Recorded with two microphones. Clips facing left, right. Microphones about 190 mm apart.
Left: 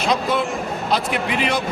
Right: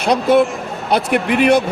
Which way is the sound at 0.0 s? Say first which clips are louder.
Right 7 dB; 60° right (ahead or behind).